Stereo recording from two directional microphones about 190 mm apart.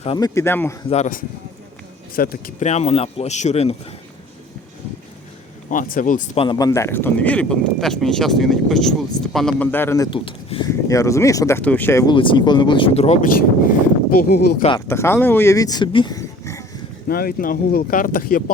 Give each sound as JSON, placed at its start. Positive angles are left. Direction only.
{"t": 0.0, "sound": "speech", "side_deg": 25}
{"t": 0.3, "sound": "speech", "side_deg": 10}
{"t": 0.9, "sound": "speech", "side_deg": 40}
{"t": 2.1, "sound": "speech", "side_deg": 50}
{"t": 5.7, "sound": "speech", "side_deg": 45}
{"t": 6.4, "sound": "speech", "side_deg": 20}
{"t": 10.7, "sound": "speech", "side_deg": 15}
{"t": 12.1, "sound": "speech", "side_deg": 25}
{"t": 14.1, "sound": "speech", "side_deg": 55}
{"t": 14.8, "sound": "speech", "side_deg": 15}
{"t": 17.1, "sound": "speech", "side_deg": 50}